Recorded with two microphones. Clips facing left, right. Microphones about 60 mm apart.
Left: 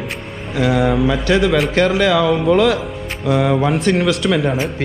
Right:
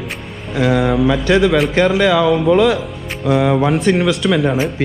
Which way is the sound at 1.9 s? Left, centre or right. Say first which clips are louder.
Right 2 dB; right.